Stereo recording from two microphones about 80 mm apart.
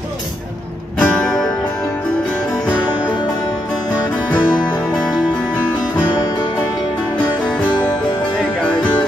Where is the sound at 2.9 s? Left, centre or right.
Left.